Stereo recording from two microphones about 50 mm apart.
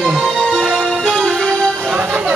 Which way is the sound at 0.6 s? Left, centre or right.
Centre.